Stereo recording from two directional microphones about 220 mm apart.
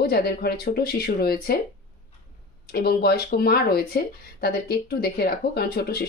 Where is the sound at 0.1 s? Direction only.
45° left (ahead or behind).